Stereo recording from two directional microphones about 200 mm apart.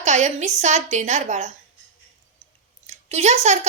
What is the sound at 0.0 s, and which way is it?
A woman's voice, 35° right (ahead or behind).